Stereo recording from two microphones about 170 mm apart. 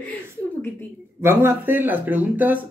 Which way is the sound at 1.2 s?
10° right (ahead or behind).